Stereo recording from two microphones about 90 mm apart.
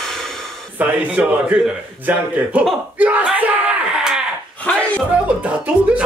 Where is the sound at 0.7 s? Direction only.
15° right (ahead or behind).